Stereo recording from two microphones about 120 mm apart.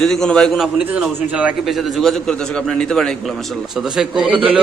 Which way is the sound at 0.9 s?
10° right (ahead or behind).